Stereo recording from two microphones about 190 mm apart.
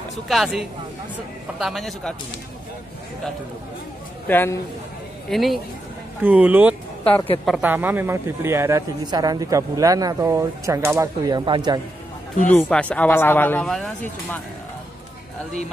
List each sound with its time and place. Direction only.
0.1 s speech: centre (ahead or behind)
4.3 s a man's voice: 10° left (ahead or behind)
5.3 s a man's voice: centre (ahead or behind); by 11.8 s 25° right (ahead or behind)
12.4 s a man's voice: 10° left (ahead or behind)